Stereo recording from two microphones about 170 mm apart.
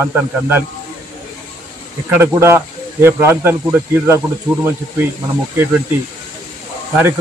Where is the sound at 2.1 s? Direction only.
15° right (ahead or behind).